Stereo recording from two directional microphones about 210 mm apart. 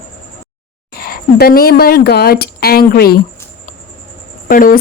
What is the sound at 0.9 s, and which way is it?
Speech, 45° left (ahead or behind).